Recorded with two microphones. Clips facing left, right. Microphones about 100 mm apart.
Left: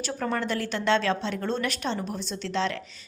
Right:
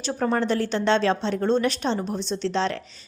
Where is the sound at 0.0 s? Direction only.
30° right (ahead or behind).